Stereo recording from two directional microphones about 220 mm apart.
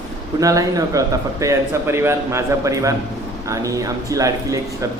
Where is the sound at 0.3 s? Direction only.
15° right (ahead or behind).